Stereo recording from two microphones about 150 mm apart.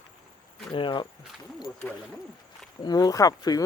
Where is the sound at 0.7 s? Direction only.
30° left (ahead or behind).